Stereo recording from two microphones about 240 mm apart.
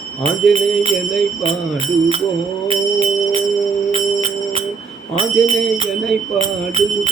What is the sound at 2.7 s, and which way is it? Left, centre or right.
Music, right.